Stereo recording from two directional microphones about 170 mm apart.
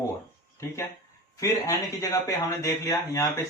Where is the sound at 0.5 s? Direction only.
15° left (ahead or behind).